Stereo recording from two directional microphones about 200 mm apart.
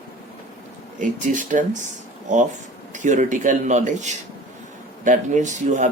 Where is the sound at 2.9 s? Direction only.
40° right (ahead or behind).